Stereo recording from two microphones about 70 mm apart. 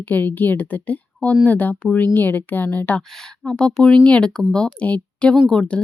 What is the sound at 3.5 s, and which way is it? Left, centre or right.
Speech, centre.